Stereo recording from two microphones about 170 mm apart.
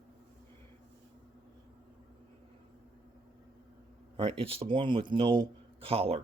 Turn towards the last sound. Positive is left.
turn(degrees=-35)  # may be behind; listen again after turning